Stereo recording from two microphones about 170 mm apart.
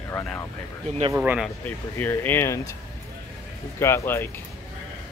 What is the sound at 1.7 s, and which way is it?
Speech, 10° left (ahead or behind).